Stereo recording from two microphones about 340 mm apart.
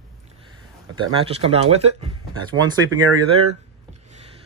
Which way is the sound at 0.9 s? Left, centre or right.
Centre.